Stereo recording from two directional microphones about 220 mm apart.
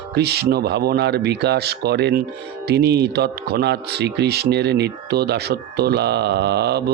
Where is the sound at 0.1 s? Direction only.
45° right (ahead or behind).